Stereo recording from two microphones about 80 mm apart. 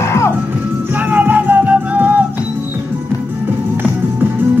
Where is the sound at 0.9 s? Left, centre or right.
Right.